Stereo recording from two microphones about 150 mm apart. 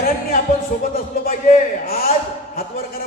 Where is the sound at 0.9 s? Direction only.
75° left (ahead or behind).